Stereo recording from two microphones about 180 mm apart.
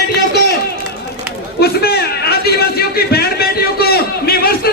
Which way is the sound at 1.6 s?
60° left (ahead or behind).